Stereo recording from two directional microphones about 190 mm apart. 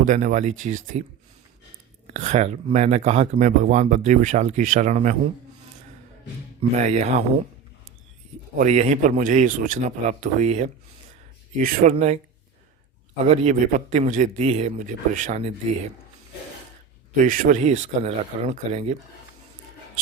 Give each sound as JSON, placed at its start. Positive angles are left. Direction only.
{"t": 0.0, "sound": "speech", "side_deg": -40}
{"t": 2.1, "sound": "speech", "side_deg": -35}
{"t": 6.6, "sound": "speech", "side_deg": -35}
{"t": 8.5, "sound": "speech", "side_deg": -35}
{"t": 13.2, "sound": "speech", "side_deg": -35}
{"t": 17.2, "sound": "speech", "side_deg": -45}